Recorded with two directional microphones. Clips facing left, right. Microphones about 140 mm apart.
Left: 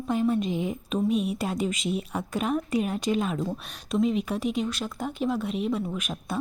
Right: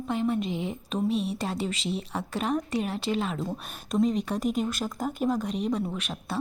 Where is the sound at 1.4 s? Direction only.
10° left (ahead or behind).